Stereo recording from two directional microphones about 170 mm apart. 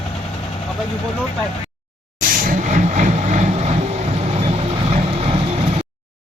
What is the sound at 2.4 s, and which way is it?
Vehicle, 50° right (ahead or behind).